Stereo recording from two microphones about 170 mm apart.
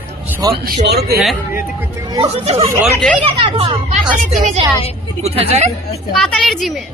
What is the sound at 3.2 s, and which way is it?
Speech, 35° right (ahead or behind).